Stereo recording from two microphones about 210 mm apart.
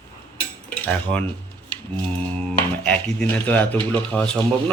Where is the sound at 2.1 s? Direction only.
5° left (ahead or behind).